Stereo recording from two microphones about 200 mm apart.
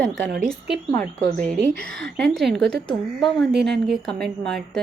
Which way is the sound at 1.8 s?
5° left (ahead or behind).